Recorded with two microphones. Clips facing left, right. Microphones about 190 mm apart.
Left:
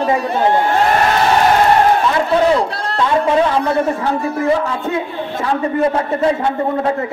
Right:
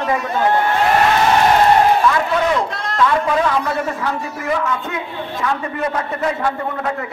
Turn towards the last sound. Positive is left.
turn(degrees=30)  # may be behind; listen again after turning